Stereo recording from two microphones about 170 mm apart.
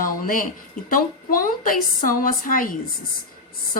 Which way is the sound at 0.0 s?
55° left (ahead or behind).